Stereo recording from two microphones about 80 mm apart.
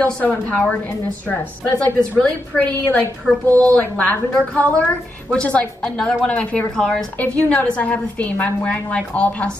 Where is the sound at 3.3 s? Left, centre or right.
Centre.